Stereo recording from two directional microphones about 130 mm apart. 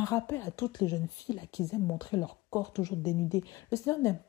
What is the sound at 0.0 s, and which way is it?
A woman's voice, 20° left (ahead or behind).